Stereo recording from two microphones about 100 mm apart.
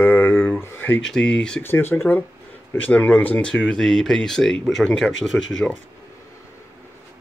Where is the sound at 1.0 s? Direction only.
5° left (ahead or behind).